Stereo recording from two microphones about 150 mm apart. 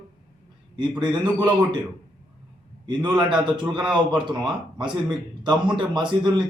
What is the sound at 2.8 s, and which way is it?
A man's voice, 30° right (ahead or behind).